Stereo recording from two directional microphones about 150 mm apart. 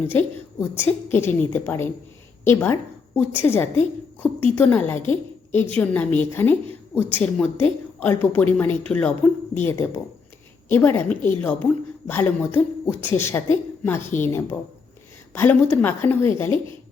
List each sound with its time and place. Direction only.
0.0 s a woman's voice: 15° left (ahead or behind)
15.7 s a woman's voice: 15° left (ahead or behind)